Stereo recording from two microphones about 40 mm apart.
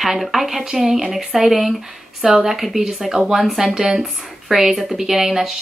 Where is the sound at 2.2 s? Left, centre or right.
Centre.